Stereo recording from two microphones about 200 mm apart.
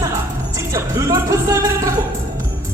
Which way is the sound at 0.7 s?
15° right (ahead or behind).